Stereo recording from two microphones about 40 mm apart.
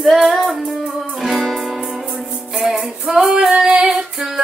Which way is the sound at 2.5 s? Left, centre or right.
Centre.